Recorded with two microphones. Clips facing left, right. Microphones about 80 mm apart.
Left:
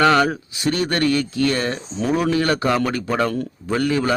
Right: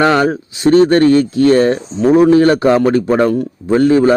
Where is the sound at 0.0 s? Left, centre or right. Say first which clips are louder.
Right 4 dB; right.